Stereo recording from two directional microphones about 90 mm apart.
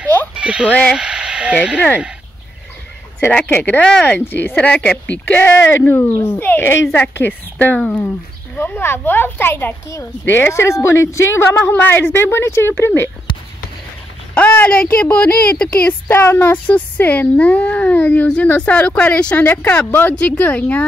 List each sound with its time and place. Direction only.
0.3 s a sound: 10° right (ahead or behind)
0.7 s a child's voice: 10° left (ahead or behind)
0.9 s speech: 10° right (ahead or behind)
3.3 s a child's voice: 15° left (ahead or behind)
14.3 s a child's voice: 20° left (ahead or behind)
16.1 s a child's voice: 25° left (ahead or behind)